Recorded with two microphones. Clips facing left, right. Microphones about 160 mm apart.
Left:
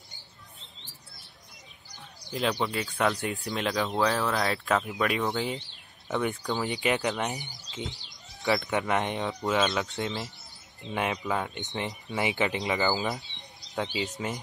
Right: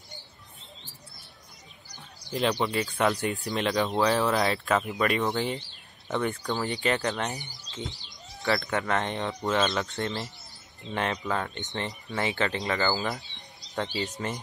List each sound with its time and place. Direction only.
2.1 s basketball bounce: centre (ahead or behind)
2.6 s speech: centre (ahead or behind); by 9.2 s 15° left (ahead or behind)
9.2 s speech: centre (ahead or behind)
10.8 s speech: 15° left (ahead or behind)
13.7 s speech: 5° left (ahead or behind)